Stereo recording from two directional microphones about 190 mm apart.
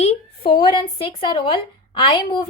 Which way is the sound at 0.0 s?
30° left (ahead or behind).